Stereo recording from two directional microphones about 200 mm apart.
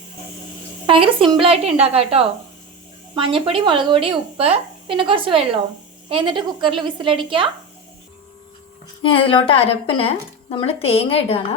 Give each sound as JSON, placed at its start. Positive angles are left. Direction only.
{"t": 0.9, "sound": "speech", "side_deg": -25}
{"t": 9.0, "sound": "a woman's voice", "side_deg": 25}